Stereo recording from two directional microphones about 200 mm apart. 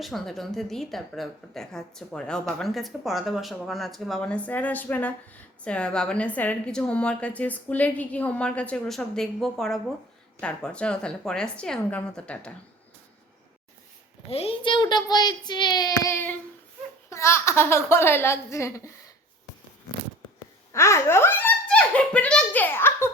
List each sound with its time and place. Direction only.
0.0 s a woman's voice: centre (ahead or behind)
14.3 s a child's voice: 30° left (ahead or behind); by 19.1 s 15° left (ahead or behind)
20.7 s giggle: 15° left (ahead or behind)